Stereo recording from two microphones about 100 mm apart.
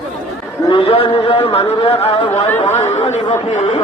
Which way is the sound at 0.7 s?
70° left (ahead or behind).